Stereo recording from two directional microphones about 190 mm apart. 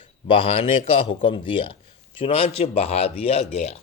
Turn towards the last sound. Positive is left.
turn(degrees=35)  # may be behind; listen again after turning